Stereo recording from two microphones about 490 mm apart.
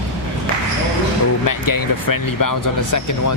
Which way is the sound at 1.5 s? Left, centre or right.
Left.